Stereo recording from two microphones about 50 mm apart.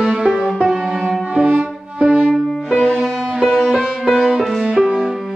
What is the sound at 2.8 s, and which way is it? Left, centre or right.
Music, centre.